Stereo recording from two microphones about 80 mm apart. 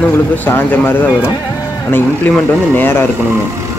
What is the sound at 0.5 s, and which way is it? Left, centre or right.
Speech, left.